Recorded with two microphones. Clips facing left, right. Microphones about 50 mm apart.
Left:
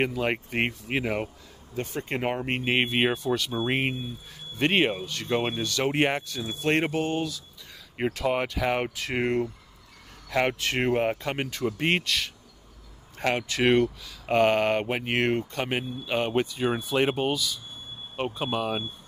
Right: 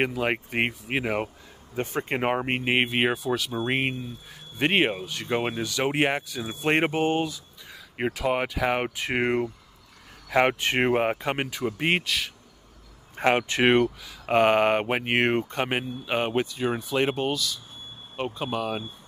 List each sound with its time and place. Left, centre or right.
0.0 s speech: centre
6.4 s speech: centre
8.0 s speech: centre
8.9 s speech: right
13.2 s speech: right
14.0 s speech: centre
16.3 s speech: centre